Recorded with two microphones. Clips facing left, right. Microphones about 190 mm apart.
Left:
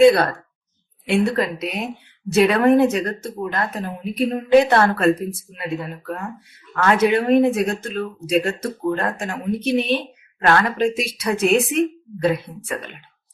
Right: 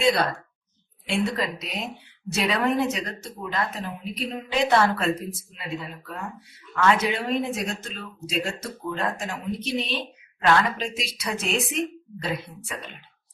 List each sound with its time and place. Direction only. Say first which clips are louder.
0.0 s speech: left 9 dB; 55° left (ahead or behind)